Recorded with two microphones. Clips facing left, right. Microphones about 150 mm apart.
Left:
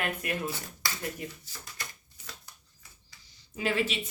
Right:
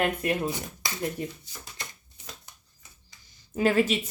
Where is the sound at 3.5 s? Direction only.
45° right (ahead or behind).